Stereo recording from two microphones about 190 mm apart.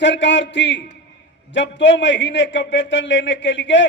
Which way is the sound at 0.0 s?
70° left (ahead or behind).